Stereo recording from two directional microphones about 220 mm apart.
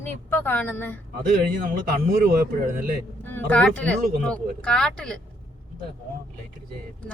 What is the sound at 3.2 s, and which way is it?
Speech, 10° left (ahead or behind).